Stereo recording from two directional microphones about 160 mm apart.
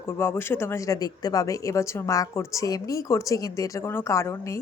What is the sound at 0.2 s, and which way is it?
A woman's voice, 15° left (ahead or behind).